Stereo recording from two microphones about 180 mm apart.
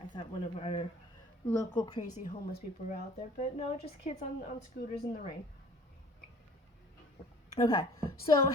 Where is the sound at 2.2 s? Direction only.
55° left (ahead or behind).